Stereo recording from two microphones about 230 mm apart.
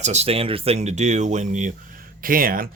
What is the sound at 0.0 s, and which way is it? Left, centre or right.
Speech, right.